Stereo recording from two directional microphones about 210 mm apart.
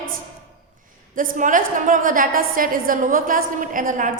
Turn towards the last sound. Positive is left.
turn(degrees=-40)  # may be behind; listen again after turning